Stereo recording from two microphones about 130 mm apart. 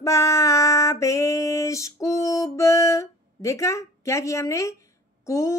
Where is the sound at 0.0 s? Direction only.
25° left (ahead or behind).